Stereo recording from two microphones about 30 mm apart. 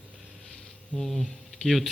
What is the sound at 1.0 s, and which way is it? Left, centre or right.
Speech, centre.